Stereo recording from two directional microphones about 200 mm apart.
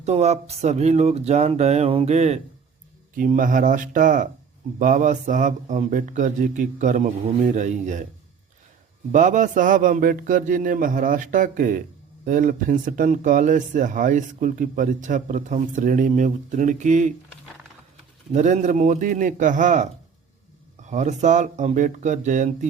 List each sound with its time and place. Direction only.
0.0 s speech: 35° right (ahead or behind)
9.1 s speech: 40° right (ahead or behind)
18.3 s speech: 35° right (ahead or behind)